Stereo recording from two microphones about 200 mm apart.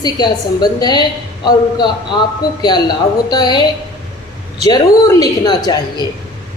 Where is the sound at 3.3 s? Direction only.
20° left (ahead or behind).